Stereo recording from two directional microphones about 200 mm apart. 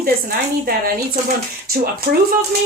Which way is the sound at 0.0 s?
50° right (ahead or behind).